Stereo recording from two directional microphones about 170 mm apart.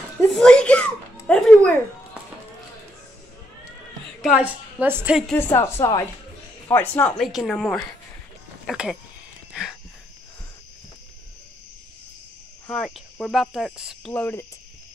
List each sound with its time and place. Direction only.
0.3 s a sound: 5° left (ahead or behind)
4.2 s a woman's voice: 5° right (ahead or behind)
5.6 s a woman's voice: 15° left (ahead or behind)
7.2 s cricket: centre (ahead or behind)
8.6 s speech: 5° right (ahead or behind)
9.5 s a sound: 5° right (ahead or behind)
12.6 s cricket: 5° left (ahead or behind)
14.1 s speech: 10° left (ahead or behind)